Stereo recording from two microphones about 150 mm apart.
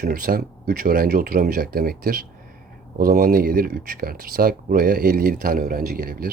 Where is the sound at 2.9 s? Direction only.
75° right (ahead or behind).